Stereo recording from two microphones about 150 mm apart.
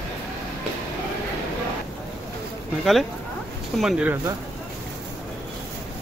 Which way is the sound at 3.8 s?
5° right (ahead or behind).